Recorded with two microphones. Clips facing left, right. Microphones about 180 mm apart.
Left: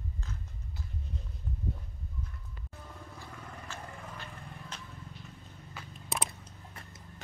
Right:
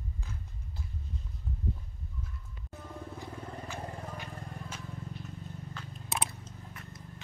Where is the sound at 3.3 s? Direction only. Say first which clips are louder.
Right 4 dB; 30° right (ahead or behind).